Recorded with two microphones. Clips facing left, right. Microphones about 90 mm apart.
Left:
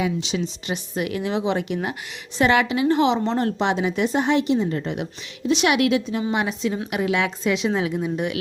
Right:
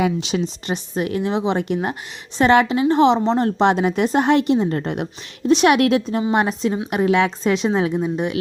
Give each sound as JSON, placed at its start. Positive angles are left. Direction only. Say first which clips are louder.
{"t": 0.0, "sound": "a woman's voice", "louder": "right 4 dB", "side_deg": -55}
{"t": 0.7, "sound": "a woman's voice", "louder": "right 3 dB", "side_deg": -35}
{"t": 3.6, "sound": "a woman's voice", "louder": "right 5 dB", "side_deg": -45}